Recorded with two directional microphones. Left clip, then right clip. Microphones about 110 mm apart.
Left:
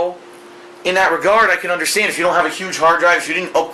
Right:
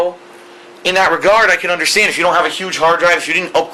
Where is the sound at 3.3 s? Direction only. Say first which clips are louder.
Right 3 dB; 40° right (ahead or behind).